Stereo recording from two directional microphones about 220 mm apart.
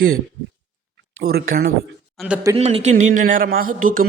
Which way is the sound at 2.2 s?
Centre (ahead or behind).